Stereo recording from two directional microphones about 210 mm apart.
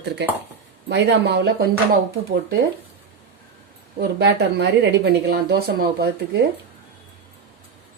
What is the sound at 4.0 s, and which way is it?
Speech, 50° right (ahead or behind).